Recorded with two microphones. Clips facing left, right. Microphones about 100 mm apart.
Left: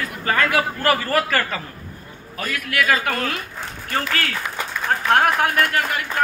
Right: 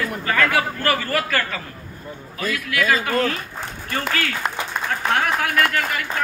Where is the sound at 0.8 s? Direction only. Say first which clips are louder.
Left 2 dB; 40° left (ahead or behind).